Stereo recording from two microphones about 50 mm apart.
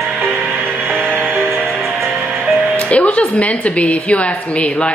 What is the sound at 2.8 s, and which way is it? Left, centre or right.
A woman's voice, left.